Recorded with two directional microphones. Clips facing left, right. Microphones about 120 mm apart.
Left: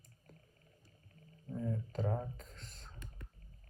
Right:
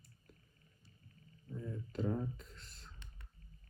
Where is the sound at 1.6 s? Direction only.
40° left (ahead or behind).